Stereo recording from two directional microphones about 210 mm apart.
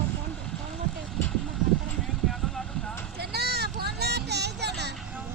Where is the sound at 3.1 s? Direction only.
50° right (ahead or behind).